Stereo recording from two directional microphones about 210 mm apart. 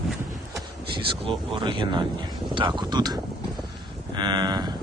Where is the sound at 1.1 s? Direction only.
25° right (ahead or behind).